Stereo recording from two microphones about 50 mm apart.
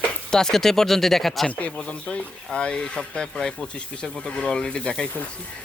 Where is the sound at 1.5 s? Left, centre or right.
Left.